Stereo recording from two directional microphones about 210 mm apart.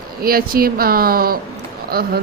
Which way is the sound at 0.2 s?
45° right (ahead or behind).